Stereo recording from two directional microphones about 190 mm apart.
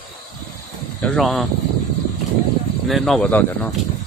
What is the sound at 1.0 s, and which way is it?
Speech, centre (ahead or behind).